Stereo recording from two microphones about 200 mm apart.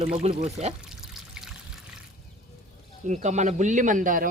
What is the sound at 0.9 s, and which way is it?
Pour, centre (ahead or behind).